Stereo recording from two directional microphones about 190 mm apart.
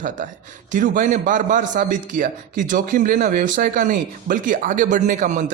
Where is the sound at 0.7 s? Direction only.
40° right (ahead or behind).